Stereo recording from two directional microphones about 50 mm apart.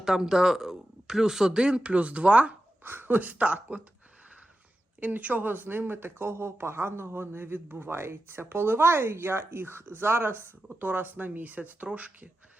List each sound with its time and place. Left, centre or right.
0.0 s speech: centre; by 2.6 s right
2.8 s speech: right
4.9 s speech: right
10.8 s speech: right